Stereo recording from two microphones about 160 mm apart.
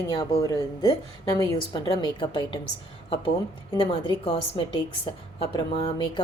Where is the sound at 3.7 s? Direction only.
30° left (ahead or behind).